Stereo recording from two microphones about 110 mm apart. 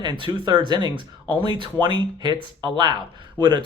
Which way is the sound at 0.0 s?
45° right (ahead or behind).